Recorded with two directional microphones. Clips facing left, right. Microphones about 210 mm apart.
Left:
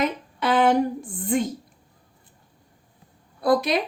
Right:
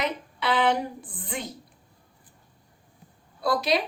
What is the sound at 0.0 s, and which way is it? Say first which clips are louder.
A woman's voice: left 4 dB; 45° left (ahead or behind).